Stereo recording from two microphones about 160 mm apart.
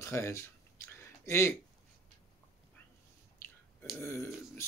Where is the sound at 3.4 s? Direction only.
15° left (ahead or behind).